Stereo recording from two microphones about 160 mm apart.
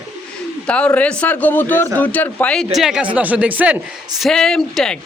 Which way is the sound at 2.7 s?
5° right (ahead or behind).